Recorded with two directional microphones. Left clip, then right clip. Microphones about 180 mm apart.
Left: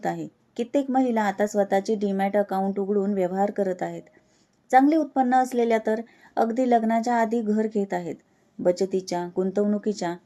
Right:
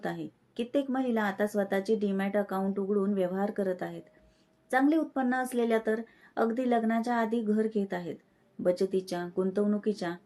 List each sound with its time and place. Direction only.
0.0 s speech: 35° left (ahead or behind)